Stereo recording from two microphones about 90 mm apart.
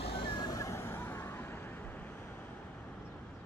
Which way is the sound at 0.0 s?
80° left.